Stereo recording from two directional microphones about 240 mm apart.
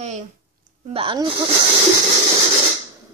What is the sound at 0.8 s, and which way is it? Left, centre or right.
Speech, right.